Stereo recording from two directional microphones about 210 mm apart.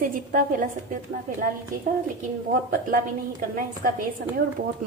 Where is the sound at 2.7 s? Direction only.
40° right (ahead or behind).